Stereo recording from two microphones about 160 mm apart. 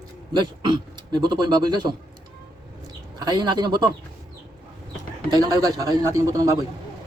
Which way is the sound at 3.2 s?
25° right (ahead or behind).